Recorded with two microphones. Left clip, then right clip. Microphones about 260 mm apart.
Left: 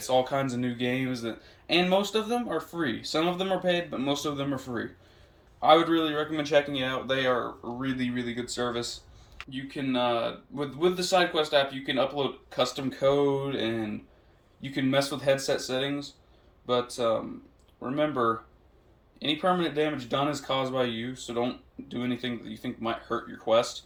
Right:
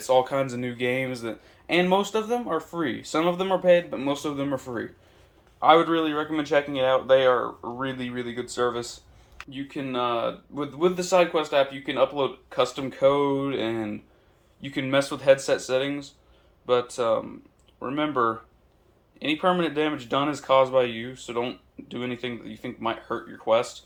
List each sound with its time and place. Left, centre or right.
0.1 s speech: centre